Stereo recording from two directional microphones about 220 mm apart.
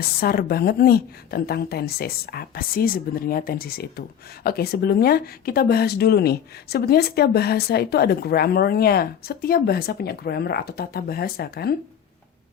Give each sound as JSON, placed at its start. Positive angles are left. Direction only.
{"t": 0.0, "sound": "a woman's voice", "side_deg": 45}